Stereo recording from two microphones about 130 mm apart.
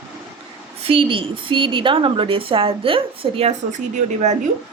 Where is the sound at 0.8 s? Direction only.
45° right (ahead or behind).